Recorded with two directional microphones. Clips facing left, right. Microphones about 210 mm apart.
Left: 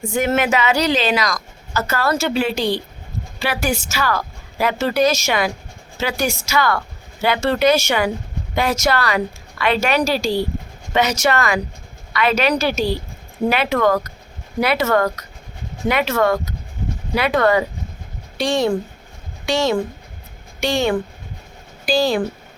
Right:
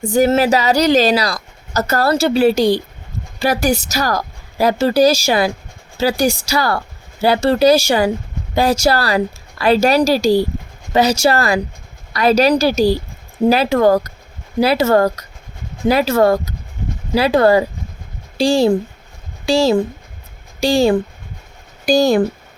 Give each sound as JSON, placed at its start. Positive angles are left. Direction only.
{"t": 0.0, "sound": "speech", "side_deg": -35}
{"t": 21.8, "sound": "speech", "side_deg": -45}